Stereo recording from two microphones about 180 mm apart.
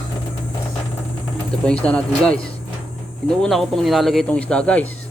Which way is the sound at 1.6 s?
5° left (ahead or behind).